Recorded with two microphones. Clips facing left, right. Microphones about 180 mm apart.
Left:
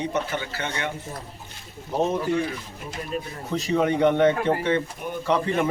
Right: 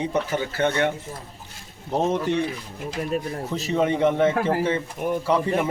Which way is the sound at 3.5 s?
Centre (ahead or behind).